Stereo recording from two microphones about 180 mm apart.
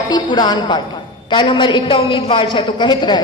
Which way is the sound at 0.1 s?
25° left (ahead or behind).